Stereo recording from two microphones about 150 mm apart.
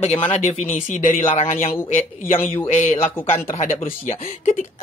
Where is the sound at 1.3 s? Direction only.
40° left (ahead or behind).